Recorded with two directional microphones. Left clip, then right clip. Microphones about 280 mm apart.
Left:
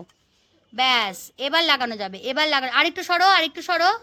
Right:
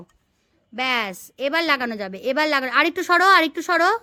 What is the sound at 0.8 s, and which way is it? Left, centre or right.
A woman's voice, centre.